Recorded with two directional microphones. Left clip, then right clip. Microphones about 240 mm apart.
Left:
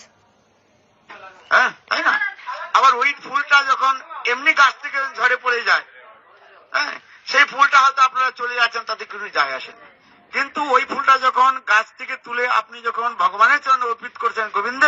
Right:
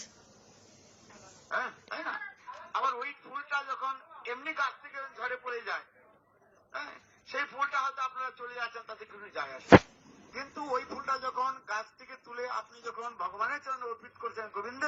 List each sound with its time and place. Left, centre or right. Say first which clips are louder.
1.5 s a sound: left 19 dB; left
6.7 s a man's voice: left 19 dB; left
11.9 s a man's voice: left 18 dB; left